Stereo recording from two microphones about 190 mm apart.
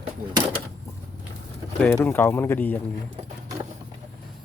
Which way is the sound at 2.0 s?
10° left (ahead or behind).